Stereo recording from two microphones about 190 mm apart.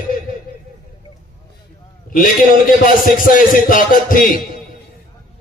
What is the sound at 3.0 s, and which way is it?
Speech, 45° left (ahead or behind).